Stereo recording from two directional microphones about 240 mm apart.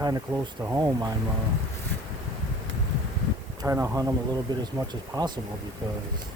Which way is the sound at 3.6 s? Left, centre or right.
Centre.